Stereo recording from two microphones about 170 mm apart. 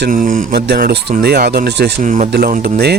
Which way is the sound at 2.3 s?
60° right (ahead or behind).